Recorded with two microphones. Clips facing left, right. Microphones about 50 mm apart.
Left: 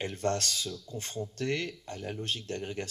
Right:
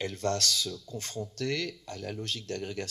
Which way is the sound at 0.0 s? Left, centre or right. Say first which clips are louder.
Right 1 dB; left.